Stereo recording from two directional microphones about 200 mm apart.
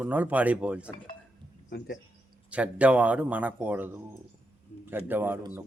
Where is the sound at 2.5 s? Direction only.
5° right (ahead or behind).